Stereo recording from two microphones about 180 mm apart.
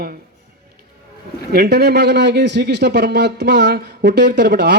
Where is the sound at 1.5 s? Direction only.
65° right (ahead or behind).